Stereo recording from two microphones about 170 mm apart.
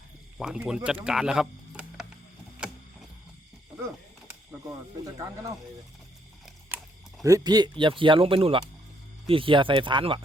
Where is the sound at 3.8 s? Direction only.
15° right (ahead or behind).